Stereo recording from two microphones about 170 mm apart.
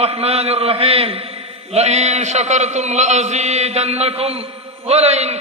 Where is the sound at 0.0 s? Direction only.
35° right (ahead or behind).